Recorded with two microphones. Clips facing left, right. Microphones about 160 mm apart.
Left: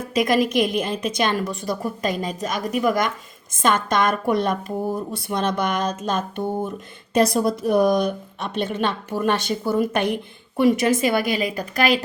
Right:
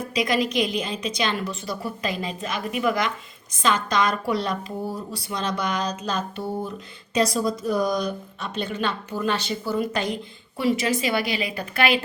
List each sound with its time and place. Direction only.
0.1 s a woman's voice: 50° left (ahead or behind)